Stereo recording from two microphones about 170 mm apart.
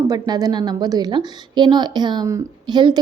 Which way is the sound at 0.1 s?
20° right (ahead or behind).